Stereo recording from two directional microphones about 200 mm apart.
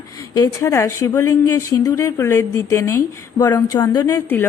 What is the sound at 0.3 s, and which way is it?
Speech, 15° left (ahead or behind).